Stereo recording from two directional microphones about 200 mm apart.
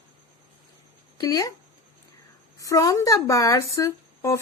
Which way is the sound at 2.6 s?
15° left (ahead or behind).